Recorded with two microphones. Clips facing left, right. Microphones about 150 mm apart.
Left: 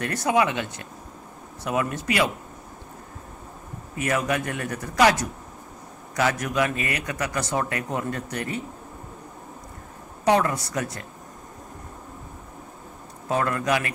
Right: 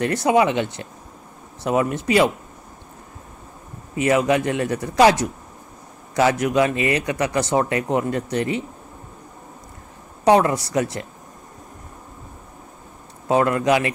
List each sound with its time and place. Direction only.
0.0 s speech: 25° right (ahead or behind)
3.9 s speech: 20° right (ahead or behind)
6.1 s speech: 25° right (ahead or behind)
10.4 s speech: 25° right (ahead or behind)
13.3 s speech: 20° right (ahead or behind)